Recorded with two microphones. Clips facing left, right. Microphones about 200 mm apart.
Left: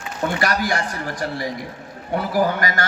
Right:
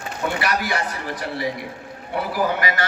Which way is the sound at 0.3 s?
45° left (ahead or behind).